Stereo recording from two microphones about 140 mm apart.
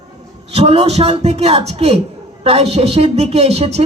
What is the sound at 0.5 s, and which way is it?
A man's voice, 45° right (ahead or behind).